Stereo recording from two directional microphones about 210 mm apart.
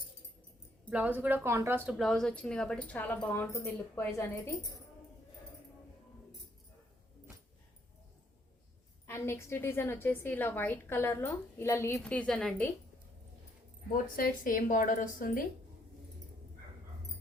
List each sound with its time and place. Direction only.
0.9 s speech: 5° right (ahead or behind); by 4.3 s 15° left (ahead or behind)
9.0 s a woman's voice: 10° left (ahead or behind)
13.9 s speech: 40° left (ahead or behind)